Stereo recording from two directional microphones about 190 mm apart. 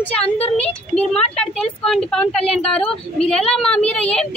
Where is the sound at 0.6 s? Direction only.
5° left (ahead or behind).